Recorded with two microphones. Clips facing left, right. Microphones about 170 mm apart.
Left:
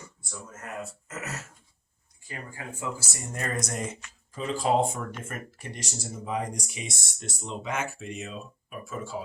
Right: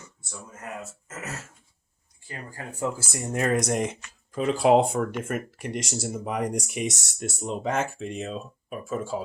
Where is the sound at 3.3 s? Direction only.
80° right; by 7.0 s 60° right (ahead or behind).